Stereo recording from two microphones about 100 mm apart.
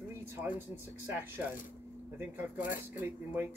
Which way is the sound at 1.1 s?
20° right (ahead or behind).